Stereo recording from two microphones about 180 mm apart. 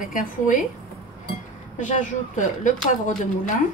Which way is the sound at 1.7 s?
45° left (ahead or behind).